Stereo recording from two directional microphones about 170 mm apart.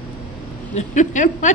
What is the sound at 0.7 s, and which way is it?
Speech, 45° left (ahead or behind).